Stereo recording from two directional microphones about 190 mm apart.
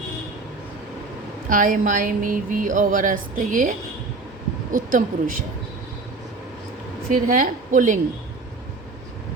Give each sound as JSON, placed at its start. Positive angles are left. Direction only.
{"t": 1.5, "sound": "speech", "side_deg": -45}
{"t": 7.1, "sound": "speech", "side_deg": -45}